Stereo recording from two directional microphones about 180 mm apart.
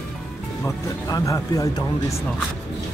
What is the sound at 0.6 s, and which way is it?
Speech, 20° left (ahead or behind).